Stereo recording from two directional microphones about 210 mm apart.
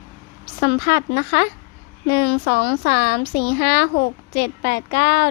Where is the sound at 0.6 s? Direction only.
45° left (ahead or behind).